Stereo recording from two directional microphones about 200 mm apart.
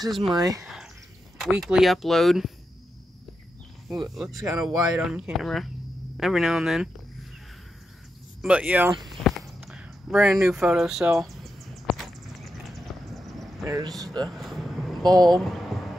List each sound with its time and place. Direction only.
0.1 s speech: centre (ahead or behind)
0.4 s speech: 15° right (ahead or behind)
1.4 s speech: centre (ahead or behind)
3.9 s speech: centre (ahead or behind)
8.4 s speech: 5° right (ahead or behind)
9.2 s a sound: centre (ahead or behind)
13.3 s vehicle: centre (ahead or behind)
13.7 s speech: 15° right (ahead or behind)
14.3 s vehicle: centre (ahead or behind)
15.2 s speech: centre (ahead or behind)